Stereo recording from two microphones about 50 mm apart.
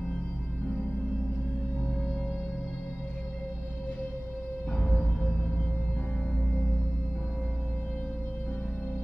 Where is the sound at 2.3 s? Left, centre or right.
Left.